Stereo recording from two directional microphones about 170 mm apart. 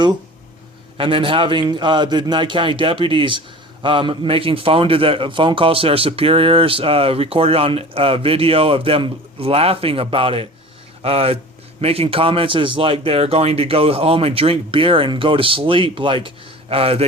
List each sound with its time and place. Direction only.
0.9 s a man's voice: 30° right (ahead or behind)